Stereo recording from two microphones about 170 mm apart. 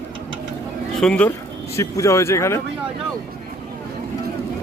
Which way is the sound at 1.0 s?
5° left (ahead or behind).